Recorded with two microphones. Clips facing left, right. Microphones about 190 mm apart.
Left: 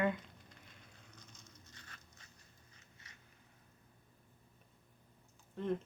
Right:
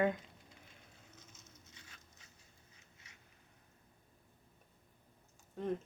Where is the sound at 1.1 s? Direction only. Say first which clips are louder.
Left 1 dB; 5° right (ahead or behind).